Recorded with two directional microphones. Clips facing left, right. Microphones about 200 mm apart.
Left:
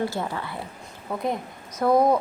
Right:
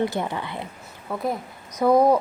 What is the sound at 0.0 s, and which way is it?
Speech, 20° right (ahead or behind).